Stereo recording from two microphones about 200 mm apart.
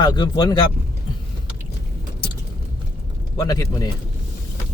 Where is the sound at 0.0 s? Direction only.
20° left (ahead or behind).